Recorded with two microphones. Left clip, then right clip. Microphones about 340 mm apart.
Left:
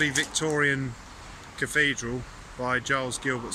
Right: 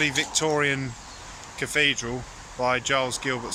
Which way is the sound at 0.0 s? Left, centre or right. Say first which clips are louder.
Right 2 dB; centre.